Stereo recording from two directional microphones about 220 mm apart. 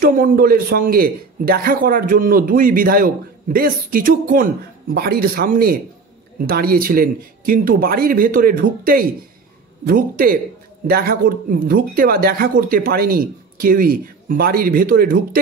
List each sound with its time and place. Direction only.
0.0 s a man's voice: 40° right (ahead or behind)